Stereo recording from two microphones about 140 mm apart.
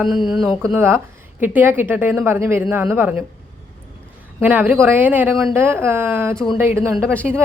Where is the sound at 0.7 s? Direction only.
15° right (ahead or behind).